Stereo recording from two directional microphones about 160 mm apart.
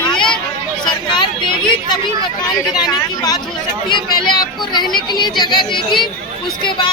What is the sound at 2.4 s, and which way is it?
Speech, 25° left (ahead or behind).